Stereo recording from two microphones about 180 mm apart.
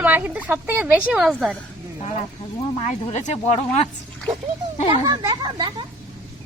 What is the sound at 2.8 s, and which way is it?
Speech, 40° left (ahead or behind).